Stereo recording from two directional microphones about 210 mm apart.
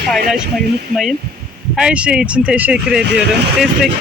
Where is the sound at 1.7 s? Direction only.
5° right (ahead or behind).